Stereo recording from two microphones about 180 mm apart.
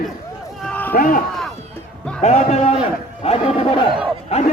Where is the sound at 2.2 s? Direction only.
35° left (ahead or behind).